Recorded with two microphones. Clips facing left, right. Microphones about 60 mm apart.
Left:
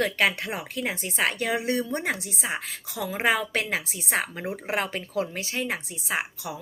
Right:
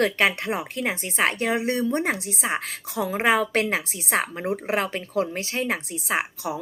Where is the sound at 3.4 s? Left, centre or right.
Right.